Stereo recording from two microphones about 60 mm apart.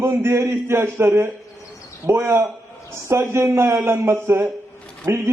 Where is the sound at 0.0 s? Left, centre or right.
Right.